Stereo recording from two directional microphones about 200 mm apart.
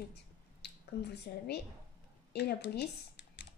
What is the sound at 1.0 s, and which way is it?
A woman's voice, 55° left (ahead or behind).